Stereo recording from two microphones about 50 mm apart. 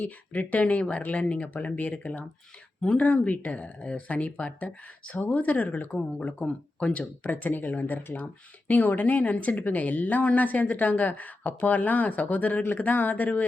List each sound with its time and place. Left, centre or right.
0.0 s speech: left
5.1 s speech: left
6.2 s speech: left
7.3 s speech: left